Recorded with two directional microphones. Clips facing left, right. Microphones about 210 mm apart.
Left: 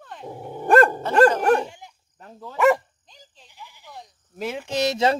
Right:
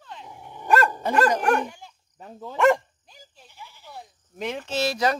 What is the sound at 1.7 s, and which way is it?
Dog, 20° left (ahead or behind).